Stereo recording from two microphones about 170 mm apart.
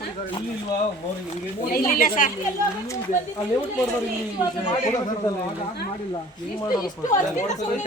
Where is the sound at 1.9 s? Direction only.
55° left (ahead or behind).